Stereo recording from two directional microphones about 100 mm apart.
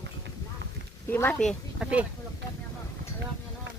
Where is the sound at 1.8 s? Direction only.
10° right (ahead or behind).